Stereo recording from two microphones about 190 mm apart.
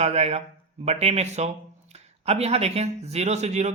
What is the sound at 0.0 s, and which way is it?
Speech, 35° right (ahead or behind).